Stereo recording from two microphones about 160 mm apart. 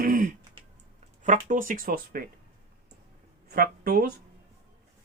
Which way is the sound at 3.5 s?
70° right (ahead or behind).